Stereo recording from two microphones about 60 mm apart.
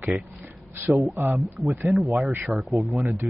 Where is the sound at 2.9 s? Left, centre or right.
Right.